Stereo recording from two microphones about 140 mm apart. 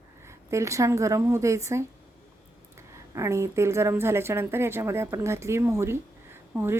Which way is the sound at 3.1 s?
20° right (ahead or behind).